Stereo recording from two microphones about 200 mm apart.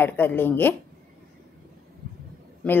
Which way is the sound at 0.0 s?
10° left (ahead or behind).